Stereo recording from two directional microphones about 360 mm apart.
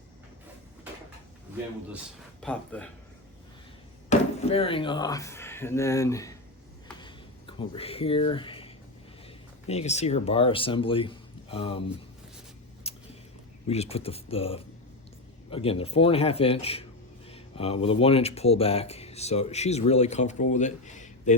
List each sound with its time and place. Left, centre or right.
2.4 s speech: centre
4.1 s speech: centre
6.8 s a sound: centre
9.6 s a man's voice: centre
12.9 s a sound: centre
13.7 s a man's voice: centre